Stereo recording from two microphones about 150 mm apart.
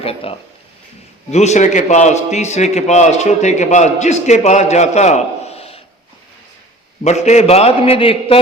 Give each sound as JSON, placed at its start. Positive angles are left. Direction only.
{"t": 0.0, "sound": "a man's voice", "side_deg": 40}
{"t": 7.0, "sound": "a man's voice", "side_deg": 50}